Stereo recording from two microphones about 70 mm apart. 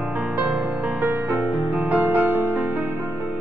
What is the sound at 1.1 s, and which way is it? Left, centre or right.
Music, right.